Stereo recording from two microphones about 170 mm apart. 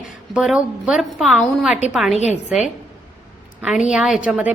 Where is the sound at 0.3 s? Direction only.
5° right (ahead or behind).